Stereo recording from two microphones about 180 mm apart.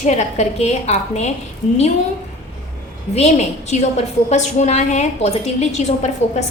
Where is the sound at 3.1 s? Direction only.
35° left (ahead or behind).